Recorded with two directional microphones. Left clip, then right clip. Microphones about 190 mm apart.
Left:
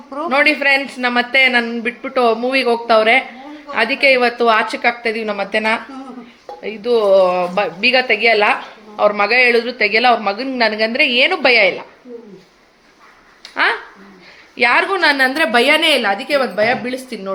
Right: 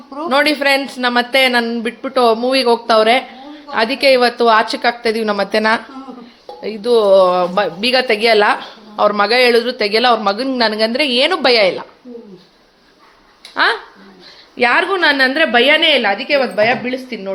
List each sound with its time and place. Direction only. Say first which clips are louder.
0.3 s a man's voice: even; 20° right (ahead or behind)
13.5 s speech: right 2 dB; 15° right (ahead or behind)
14.5 s a woman's voice: even; 5° right (ahead or behind)